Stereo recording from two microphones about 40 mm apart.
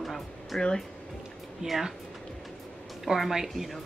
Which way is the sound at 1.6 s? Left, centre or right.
Centre.